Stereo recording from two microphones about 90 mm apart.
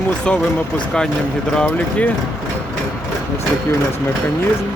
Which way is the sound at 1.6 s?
15° left (ahead or behind).